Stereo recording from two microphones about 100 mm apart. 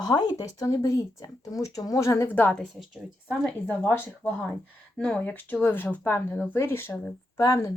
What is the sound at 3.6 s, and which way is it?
Speech, 15° left (ahead or behind).